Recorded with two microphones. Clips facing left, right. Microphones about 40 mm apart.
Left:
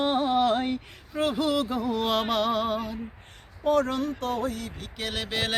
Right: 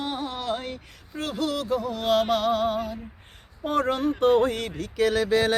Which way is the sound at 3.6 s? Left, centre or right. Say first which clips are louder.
Even; centre.